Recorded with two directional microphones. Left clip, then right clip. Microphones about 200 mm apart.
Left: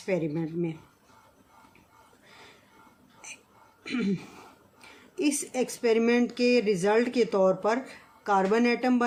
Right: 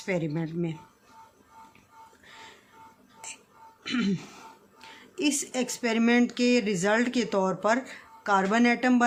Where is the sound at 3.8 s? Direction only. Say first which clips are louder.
Right 1 dB; 45° right (ahead or behind).